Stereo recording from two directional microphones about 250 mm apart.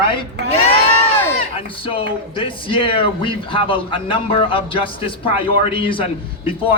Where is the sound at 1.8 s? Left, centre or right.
Left.